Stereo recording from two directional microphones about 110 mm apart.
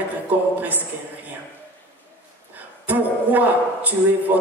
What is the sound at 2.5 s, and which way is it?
Speech, 15° right (ahead or behind).